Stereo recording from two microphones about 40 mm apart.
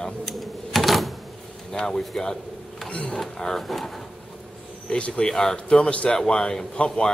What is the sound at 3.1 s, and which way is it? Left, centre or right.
Speech, centre.